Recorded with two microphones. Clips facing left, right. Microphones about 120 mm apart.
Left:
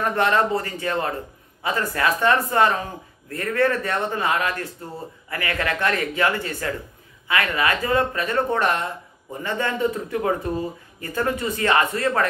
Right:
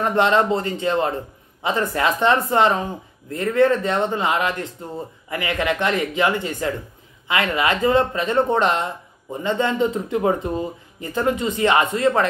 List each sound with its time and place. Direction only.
0.0 s speech: 20° right (ahead or behind)